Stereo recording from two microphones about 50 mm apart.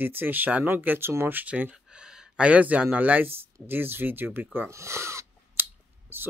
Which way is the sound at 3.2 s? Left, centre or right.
Right.